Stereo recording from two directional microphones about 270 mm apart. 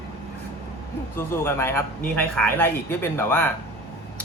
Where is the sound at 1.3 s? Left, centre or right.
Centre.